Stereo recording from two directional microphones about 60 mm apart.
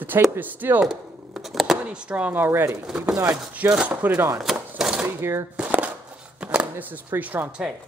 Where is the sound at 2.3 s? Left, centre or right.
Right.